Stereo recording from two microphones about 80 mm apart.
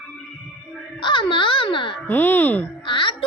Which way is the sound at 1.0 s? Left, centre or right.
Left.